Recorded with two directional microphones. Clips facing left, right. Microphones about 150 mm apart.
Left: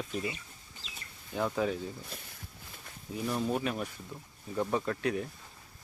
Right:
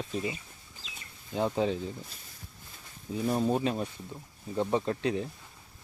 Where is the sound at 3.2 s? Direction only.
30° right (ahead or behind).